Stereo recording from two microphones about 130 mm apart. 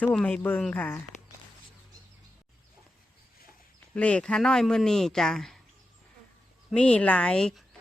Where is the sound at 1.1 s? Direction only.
65° left (ahead or behind).